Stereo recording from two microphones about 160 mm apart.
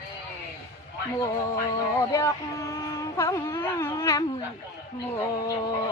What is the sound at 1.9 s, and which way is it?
Speech, 20° left (ahead or behind).